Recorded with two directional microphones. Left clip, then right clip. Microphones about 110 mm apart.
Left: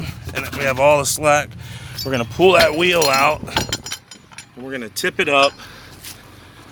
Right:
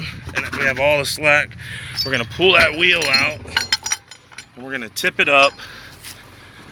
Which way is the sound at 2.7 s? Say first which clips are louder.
Even; 55° left (ahead or behind).